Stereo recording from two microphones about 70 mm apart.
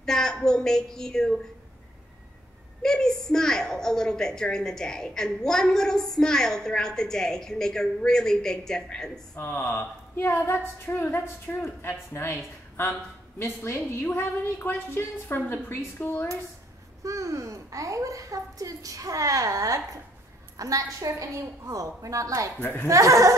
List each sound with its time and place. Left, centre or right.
0.0 s a woman's voice: centre
2.8 s a woman's voice: centre
9.4 s a woman's voice: left
13.4 s a woman's voice: left
13.7 s a woman's voice: left
17.0 s a child's voice: right
22.6 s a woman's voice: left
22.8 s a child's voice: right